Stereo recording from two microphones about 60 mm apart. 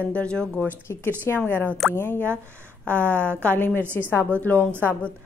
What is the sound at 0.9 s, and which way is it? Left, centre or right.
Speech, left.